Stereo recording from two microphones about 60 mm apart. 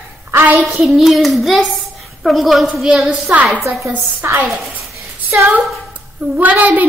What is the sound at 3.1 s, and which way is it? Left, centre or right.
Speech, right.